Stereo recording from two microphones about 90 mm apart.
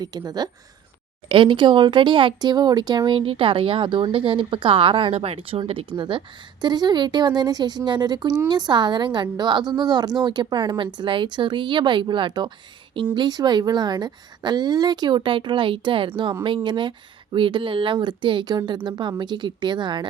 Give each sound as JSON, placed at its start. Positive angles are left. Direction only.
{"t": 0.0, "sound": "speech", "side_deg": -50}
{"t": 1.3, "sound": "a woman's voice", "side_deg": -65}
{"t": 3.2, "sound": "a woman's voice", "side_deg": -80}
{"t": 17.3, "sound": "a woman's voice", "side_deg": -75}